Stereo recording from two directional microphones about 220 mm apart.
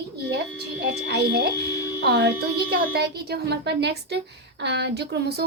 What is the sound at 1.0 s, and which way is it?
A woman's voice, 50° right (ahead or behind).